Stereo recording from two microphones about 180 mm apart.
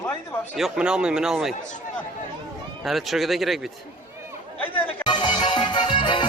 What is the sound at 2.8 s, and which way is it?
Speech, centre (ahead or behind).